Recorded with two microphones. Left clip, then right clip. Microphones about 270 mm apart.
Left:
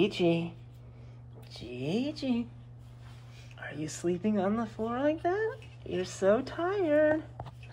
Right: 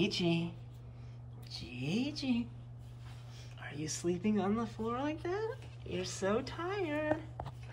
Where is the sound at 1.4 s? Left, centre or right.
Right.